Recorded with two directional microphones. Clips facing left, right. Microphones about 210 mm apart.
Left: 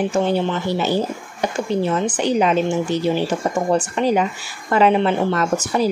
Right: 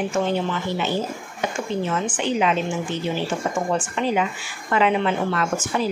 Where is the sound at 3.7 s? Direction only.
40° left (ahead or behind).